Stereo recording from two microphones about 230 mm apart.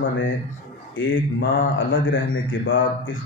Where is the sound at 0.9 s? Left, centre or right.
Left.